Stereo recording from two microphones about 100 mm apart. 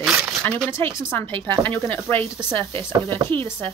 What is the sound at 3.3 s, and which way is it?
Speech, 20° left (ahead or behind).